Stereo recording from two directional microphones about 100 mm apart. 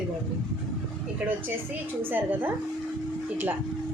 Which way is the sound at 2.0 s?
20° right (ahead or behind).